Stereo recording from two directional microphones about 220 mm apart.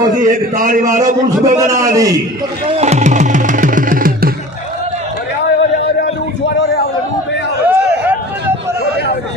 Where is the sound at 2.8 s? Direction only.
30° right (ahead or behind).